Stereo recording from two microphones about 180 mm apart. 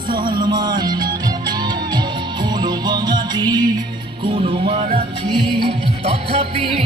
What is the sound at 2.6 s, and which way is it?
Music, 25° right (ahead or behind).